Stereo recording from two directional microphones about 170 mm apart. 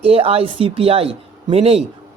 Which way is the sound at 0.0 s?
35° right (ahead or behind).